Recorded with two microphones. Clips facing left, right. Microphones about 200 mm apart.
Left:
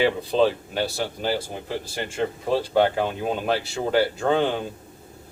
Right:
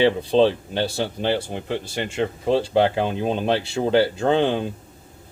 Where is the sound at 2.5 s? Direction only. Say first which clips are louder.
Right 2 dB; 25° right (ahead or behind).